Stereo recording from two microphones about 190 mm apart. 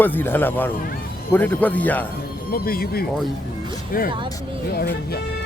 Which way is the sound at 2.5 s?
50° left (ahead or behind).